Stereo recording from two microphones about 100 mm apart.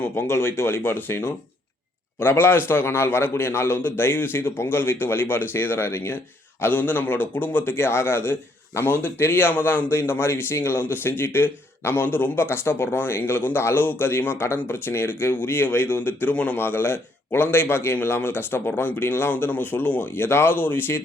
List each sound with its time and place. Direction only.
0.0 s a man's voice: 25° left (ahead or behind)